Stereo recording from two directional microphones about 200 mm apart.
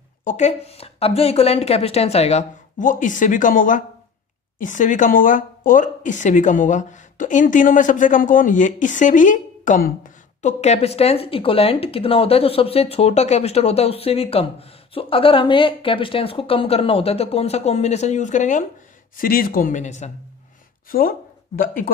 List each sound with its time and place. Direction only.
0.2 s speech: 35° left (ahead or behind)
21.5 s speech: 45° left (ahead or behind)